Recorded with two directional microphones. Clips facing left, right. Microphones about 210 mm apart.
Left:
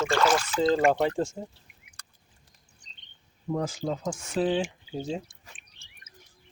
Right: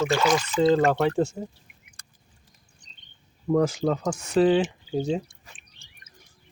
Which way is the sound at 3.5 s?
80° right.